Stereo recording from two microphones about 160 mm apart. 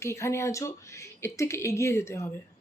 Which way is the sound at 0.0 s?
15° left (ahead or behind).